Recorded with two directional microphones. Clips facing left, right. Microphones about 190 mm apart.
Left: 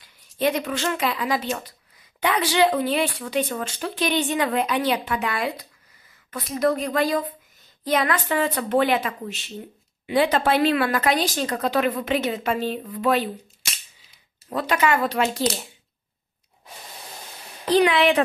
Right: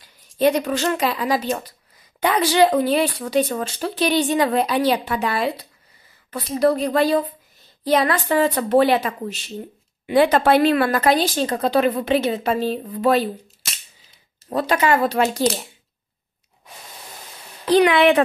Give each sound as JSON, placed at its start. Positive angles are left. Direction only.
{"t": 0.0, "sound": "speech", "side_deg": -40}
{"t": 10.0, "sound": "speech", "side_deg": -55}
{"t": 14.5, "sound": "speech", "side_deg": -35}
{"t": 17.8, "sound": "speech", "side_deg": -65}